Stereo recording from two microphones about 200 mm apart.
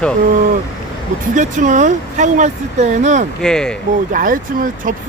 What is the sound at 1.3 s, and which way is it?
Speech, 40° right (ahead or behind).